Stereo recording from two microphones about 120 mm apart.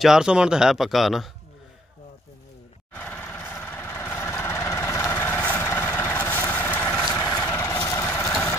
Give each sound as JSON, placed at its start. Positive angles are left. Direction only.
{"t": 0.0, "sound": "speech", "side_deg": -5}
{"t": 2.9, "sound": "vehicle", "side_deg": 15}